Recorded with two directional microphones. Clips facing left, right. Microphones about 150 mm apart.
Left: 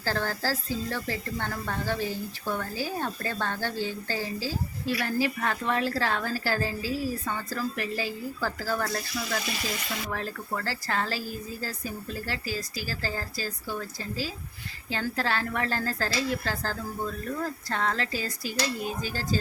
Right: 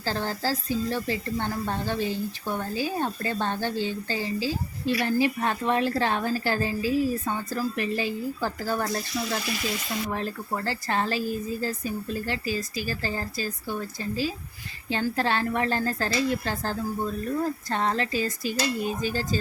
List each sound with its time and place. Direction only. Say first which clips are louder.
0.0 s speech: right 1 dB; 20° right (ahead or behind)
10.1 s speech: right 1 dB; 20° right (ahead or behind)